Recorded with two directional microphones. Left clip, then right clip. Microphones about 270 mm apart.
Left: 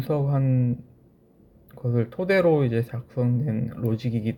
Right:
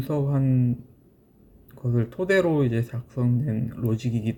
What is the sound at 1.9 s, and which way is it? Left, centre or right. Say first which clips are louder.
Speech: even; centre.